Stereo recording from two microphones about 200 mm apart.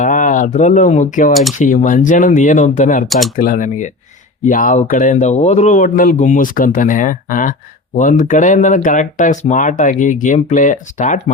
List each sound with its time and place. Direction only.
0.0 s speech: 40° left (ahead or behind)
3.1 s speech: centre (ahead or behind)
3.3 s speech: 45° left (ahead or behind)